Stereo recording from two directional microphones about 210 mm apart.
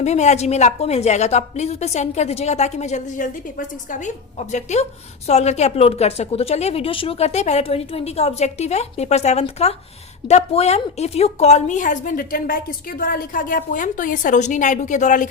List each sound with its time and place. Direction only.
0.0 s a woman's voice: 35° left (ahead or behind)